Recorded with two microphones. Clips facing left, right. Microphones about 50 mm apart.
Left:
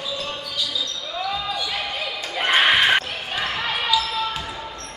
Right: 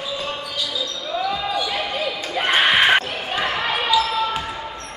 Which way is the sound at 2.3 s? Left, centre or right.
Centre.